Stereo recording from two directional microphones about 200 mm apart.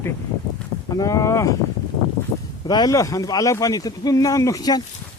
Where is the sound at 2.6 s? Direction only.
20° left (ahead or behind).